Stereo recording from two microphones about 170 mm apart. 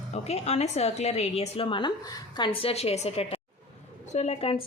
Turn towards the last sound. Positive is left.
turn(degrees=35)  # may be behind; listen again after turning